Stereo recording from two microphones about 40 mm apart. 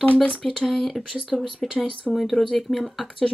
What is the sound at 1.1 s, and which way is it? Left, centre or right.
Speech, centre.